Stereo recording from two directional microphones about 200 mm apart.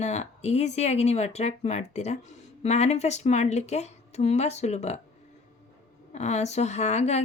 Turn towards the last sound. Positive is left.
turn(degrees=35)  # may be behind; listen again after turning